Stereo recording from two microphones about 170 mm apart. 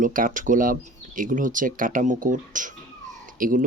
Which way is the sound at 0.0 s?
55° right (ahead or behind).